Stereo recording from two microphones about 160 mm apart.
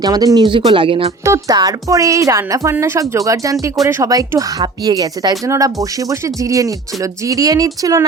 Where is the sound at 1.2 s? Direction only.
20° right (ahead or behind).